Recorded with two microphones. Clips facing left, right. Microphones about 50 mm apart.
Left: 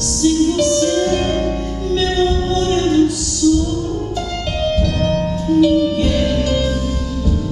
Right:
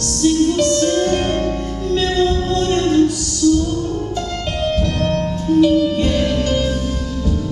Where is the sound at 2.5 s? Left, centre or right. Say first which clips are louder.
Even; centre.